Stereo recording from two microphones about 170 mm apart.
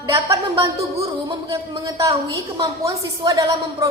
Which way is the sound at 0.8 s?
20° right (ahead or behind).